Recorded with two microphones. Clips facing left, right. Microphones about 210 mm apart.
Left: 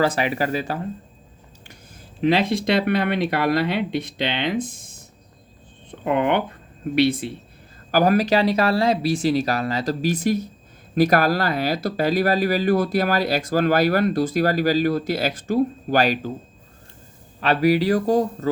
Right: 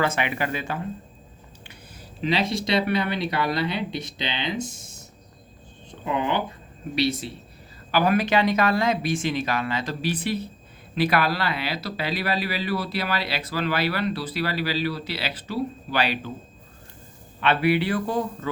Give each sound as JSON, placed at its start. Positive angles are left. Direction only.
{"t": 0.0, "sound": "speech", "side_deg": 35}
{"t": 1.6, "sound": "speech", "side_deg": 50}
{"t": 7.9, "sound": "speech", "side_deg": 40}
{"t": 17.4, "sound": "speech", "side_deg": 40}